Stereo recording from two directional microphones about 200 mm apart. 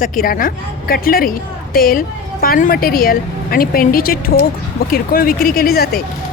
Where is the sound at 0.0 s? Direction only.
45° left (ahead or behind).